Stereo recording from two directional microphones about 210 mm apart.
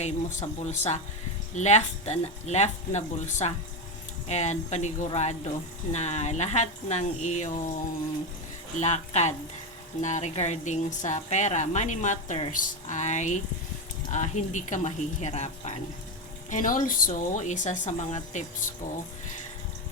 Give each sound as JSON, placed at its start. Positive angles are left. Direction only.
{"t": 0.0, "sound": "a woman's voice", "side_deg": 35}
{"t": 8.8, "sound": "a woman's voice", "side_deg": 30}